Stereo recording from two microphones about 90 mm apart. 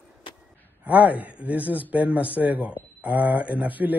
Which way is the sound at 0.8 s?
15° right (ahead or behind).